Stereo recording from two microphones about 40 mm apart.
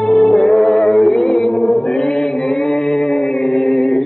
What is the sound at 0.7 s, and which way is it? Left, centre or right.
Music, centre.